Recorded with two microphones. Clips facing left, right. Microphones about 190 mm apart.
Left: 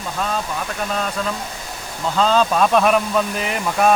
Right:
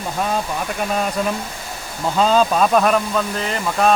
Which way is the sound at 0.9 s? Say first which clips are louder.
Right 4 dB; 15° right (ahead or behind).